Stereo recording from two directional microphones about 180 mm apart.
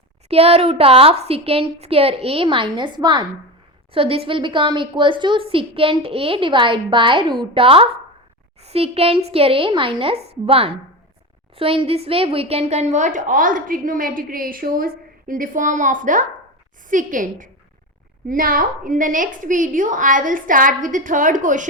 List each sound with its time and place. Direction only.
0.3 s a woman's voice: 35° right (ahead or behind)